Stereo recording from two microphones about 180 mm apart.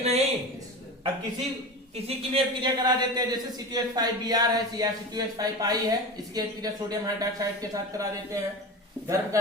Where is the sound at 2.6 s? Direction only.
25° right (ahead or behind).